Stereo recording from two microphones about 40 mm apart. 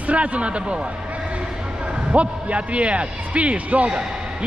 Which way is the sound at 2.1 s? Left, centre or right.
Right.